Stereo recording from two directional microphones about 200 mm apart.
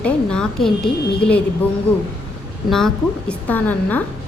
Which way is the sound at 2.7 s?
5° left (ahead or behind).